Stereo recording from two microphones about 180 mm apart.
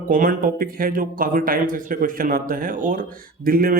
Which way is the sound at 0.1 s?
50° right (ahead or behind).